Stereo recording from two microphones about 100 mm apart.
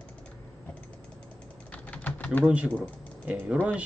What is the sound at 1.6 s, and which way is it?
Typing, 15° left (ahead or behind).